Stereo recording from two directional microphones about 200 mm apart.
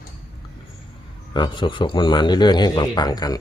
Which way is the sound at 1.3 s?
25° left (ahead or behind).